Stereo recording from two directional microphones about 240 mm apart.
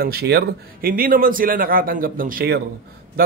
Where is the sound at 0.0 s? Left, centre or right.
Right.